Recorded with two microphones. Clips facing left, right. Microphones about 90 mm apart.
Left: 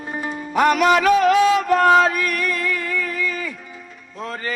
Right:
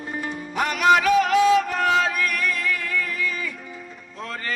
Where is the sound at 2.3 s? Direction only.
Centre (ahead or behind).